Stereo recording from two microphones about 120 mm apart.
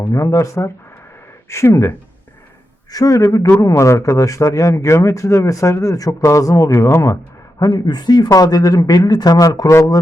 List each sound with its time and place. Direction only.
0.1 s speech: 25° left (ahead or behind)
2.9 s speech: 30° left (ahead or behind)